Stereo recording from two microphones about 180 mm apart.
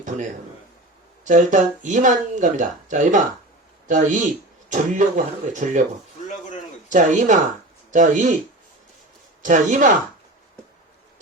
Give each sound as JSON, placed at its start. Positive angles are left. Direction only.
{"t": 1.2, "sound": "speech", "side_deg": -45}
{"t": 6.8, "sound": "speech", "side_deg": -45}
{"t": 9.4, "sound": "speech", "side_deg": -45}